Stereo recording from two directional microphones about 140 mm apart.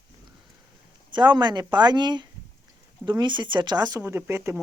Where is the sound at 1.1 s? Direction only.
35° right (ahead or behind).